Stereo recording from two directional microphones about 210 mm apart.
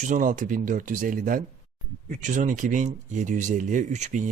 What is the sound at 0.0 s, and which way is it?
Speech, 35° right (ahead or behind).